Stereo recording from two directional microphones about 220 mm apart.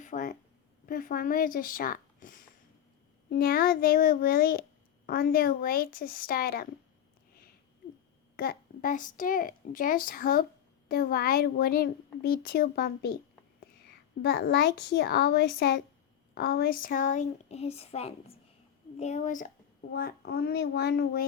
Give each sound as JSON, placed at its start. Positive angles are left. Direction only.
{"t": 0.0, "sound": "a sound", "side_deg": 35}
{"t": 0.9, "sound": "a child's voice", "side_deg": 40}
{"t": 8.4, "sound": "a child's voice", "side_deg": 40}
{"t": 14.2, "sound": "a child's voice", "side_deg": 45}